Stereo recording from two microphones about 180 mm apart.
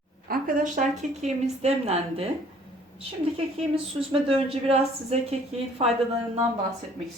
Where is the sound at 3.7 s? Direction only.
30° right (ahead or behind).